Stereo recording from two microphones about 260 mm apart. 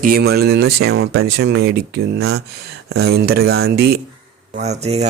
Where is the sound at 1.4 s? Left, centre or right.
Right.